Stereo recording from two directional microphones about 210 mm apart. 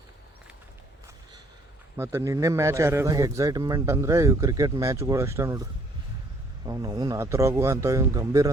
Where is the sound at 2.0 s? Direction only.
15° right (ahead or behind).